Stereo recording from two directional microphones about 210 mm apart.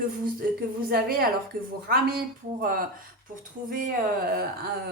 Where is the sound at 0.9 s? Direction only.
45° right (ahead or behind).